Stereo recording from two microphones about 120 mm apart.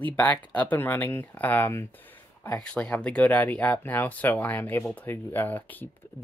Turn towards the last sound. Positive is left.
turn(degrees=15)  # may be behind; listen again after turning